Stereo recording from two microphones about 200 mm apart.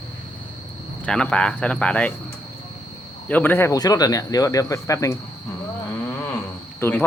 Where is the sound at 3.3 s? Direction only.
10° left (ahead or behind).